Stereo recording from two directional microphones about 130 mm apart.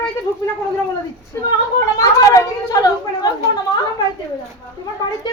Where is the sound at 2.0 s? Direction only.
25° left (ahead or behind).